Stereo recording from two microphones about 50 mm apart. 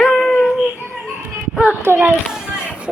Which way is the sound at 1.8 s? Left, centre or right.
Right.